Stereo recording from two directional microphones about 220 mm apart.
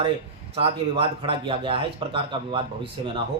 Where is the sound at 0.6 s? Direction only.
25° right (ahead or behind).